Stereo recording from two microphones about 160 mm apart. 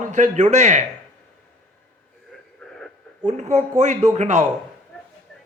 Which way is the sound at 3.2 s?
45° right (ahead or behind).